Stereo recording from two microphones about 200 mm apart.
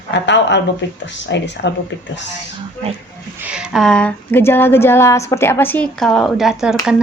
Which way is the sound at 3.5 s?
5° right (ahead or behind).